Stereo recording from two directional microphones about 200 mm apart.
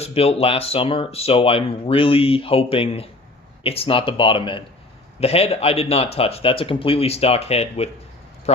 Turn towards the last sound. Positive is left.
turn(degrees=30)  # may be behind; listen again after turning